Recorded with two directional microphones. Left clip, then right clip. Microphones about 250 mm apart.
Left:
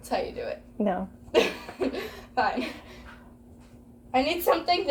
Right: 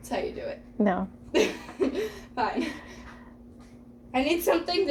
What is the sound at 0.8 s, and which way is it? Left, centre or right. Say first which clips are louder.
Speech: right 2 dB; right.